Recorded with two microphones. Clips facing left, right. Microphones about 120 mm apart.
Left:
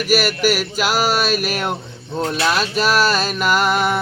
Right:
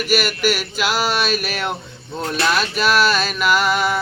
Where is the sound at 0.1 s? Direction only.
40° left (ahead or behind).